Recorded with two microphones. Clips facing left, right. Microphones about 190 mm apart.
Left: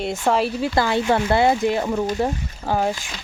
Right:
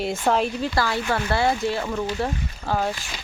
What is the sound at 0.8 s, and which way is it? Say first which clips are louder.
Speech: left 6 dB; 20° left (ahead or behind).